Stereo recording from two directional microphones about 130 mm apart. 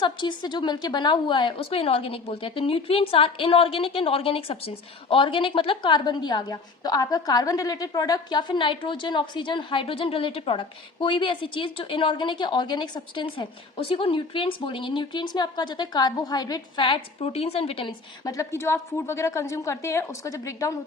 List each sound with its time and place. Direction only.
0.0 s a woman's voice: 35° left (ahead or behind)
17.2 s speech: 50° left (ahead or behind)
18.3 s a woman's voice: 20° left (ahead or behind)